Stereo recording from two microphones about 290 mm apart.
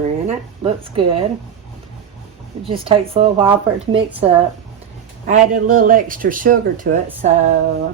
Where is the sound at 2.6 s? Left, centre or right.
Centre.